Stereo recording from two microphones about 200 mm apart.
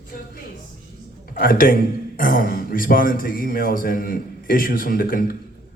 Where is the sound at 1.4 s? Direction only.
45° left (ahead or behind).